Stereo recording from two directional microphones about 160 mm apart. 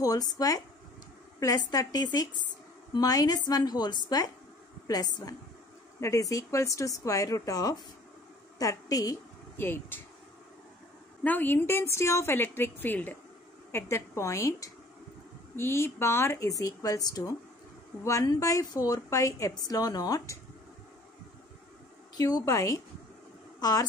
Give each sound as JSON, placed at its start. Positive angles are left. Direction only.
{"t": 0.0, "sound": "a woman's voice", "side_deg": 20}
{"t": 11.2, "sound": "a woman's voice", "side_deg": 10}
{"t": 22.1, "sound": "speech", "side_deg": 25}